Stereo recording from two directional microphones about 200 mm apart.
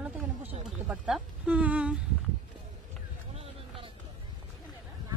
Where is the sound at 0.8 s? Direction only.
5° right (ahead or behind).